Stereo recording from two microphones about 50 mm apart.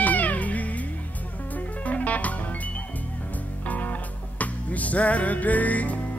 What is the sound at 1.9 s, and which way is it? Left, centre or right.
Music, left.